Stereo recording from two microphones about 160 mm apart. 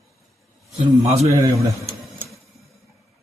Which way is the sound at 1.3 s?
20° right (ahead or behind).